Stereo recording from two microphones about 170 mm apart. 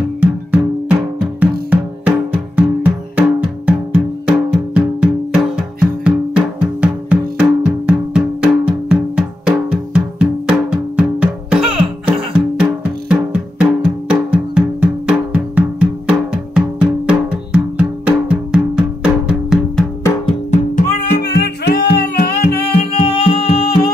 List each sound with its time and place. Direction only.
0.2 s music: 5° right (ahead or behind)
20.5 s music: 50° left (ahead or behind)
23.0 s music: 35° left (ahead or behind)